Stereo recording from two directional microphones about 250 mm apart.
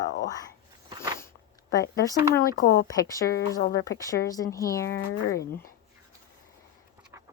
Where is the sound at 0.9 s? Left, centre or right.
Centre.